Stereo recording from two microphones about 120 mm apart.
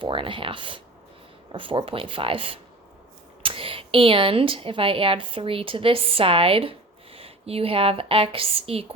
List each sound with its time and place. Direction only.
0.0 s speech: 45° right (ahead or behind)